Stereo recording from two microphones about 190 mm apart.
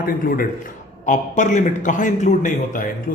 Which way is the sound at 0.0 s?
50° left (ahead or behind).